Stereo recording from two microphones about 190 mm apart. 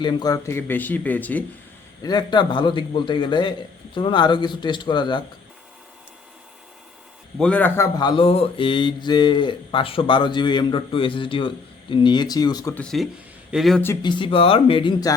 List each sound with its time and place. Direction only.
0.0 s speech: 25° left (ahead or behind)
2.0 s mantra: 25° left (ahead or behind)
7.3 s speech: 5° left (ahead or behind)
7.9 s mantra: 25° left (ahead or behind)
12.7 s speech: 5° left (ahead or behind)
13.8 s mantra: 20° left (ahead or behind)